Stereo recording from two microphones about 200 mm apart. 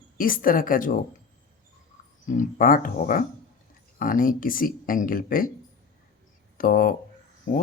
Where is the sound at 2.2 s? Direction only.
40° left (ahead or behind).